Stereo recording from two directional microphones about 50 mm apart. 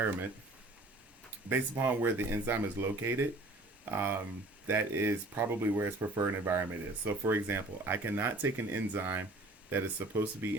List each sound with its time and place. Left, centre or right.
1.5 s speech: right
6.5 s speech: right